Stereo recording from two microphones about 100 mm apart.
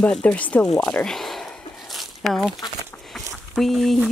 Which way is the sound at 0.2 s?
15° left (ahead or behind).